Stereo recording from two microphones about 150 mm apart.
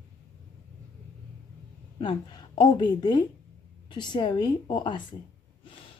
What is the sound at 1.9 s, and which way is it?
A woman's voice, 30° left (ahead or behind).